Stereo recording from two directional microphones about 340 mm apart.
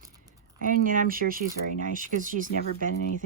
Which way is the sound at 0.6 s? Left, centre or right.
Right.